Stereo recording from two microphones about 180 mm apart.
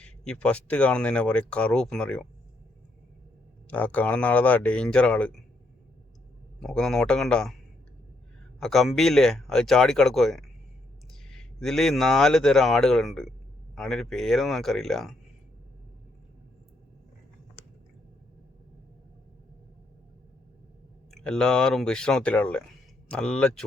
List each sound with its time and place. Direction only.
0.0 s speech: 5° left (ahead or behind)
3.7 s speech: 10° left (ahead or behind)
6.6 s speech: 5° left (ahead or behind)
8.6 s speech: centre (ahead or behind)
21.1 s speech: 5° left (ahead or behind)